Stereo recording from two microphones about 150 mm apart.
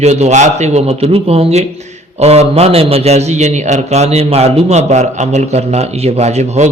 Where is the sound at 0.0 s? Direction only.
50° right (ahead or behind).